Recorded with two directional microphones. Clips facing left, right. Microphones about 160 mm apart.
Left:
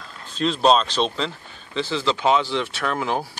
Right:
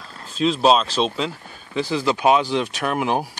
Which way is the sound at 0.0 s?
5° right (ahead or behind).